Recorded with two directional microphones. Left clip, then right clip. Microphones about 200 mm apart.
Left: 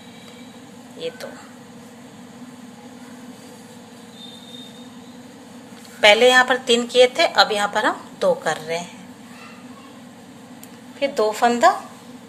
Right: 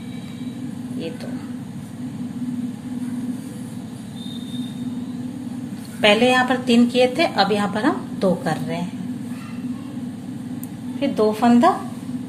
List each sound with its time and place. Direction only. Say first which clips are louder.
6.0 s a woman's voice: left 3 dB; 30° left (ahead or behind)
11.0 s a woman's voice: left 1 dB; 40° left (ahead or behind)